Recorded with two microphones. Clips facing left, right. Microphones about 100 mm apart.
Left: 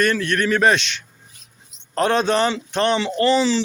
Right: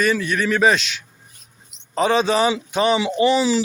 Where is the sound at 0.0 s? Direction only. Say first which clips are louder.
Even; 5° right (ahead or behind).